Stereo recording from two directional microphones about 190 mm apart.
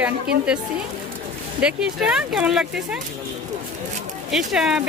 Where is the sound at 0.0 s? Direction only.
5° right (ahead or behind).